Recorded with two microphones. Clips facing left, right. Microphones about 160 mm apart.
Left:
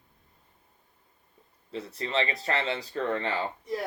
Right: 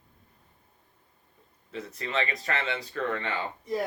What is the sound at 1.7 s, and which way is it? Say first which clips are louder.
Speech: left 2 dB; 30° left (ahead or behind).